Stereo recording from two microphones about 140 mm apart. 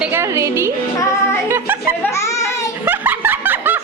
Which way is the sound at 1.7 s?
15° right (ahead or behind).